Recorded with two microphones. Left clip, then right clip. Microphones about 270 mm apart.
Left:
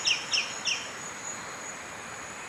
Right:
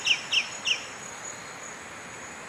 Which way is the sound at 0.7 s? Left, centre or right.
Right.